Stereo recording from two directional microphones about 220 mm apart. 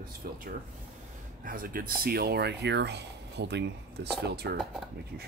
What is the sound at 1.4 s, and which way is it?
Speech, 40° right (ahead or behind).